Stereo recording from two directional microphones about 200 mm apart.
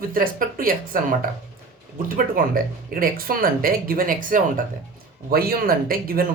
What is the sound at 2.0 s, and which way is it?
Speech, 45° right (ahead or behind).